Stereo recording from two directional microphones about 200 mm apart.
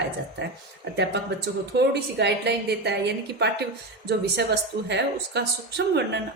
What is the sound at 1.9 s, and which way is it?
Speech, 55° right (ahead or behind).